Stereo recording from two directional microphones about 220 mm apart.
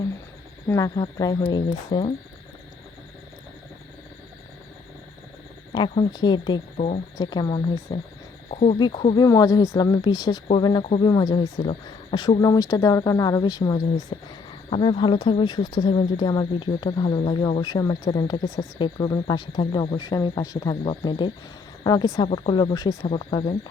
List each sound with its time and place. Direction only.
0.7 s speech: 15° left (ahead or behind)
5.7 s speech: 20° left (ahead or behind)
6.7 s speech: 30° left (ahead or behind)
7.2 s speech: 20° left (ahead or behind)
8.4 s speech: 30° left (ahead or behind)